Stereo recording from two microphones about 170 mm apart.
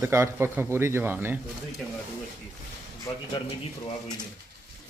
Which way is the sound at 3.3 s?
25° left (ahead or behind).